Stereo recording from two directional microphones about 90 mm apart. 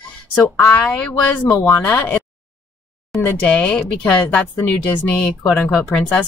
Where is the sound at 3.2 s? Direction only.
15° left (ahead or behind).